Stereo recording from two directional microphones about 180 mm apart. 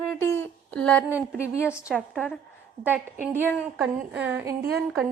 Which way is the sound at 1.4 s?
15° left (ahead or behind).